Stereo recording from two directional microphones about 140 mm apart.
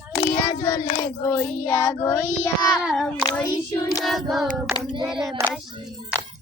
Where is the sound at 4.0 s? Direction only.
Centre (ahead or behind).